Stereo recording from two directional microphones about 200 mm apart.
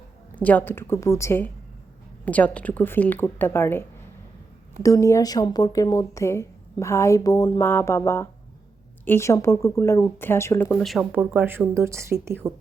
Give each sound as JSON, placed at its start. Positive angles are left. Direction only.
{"t": 0.3, "sound": "speech", "side_deg": 10}